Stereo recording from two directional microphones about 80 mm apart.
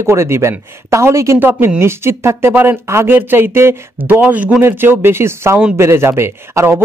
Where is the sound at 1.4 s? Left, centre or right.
Right.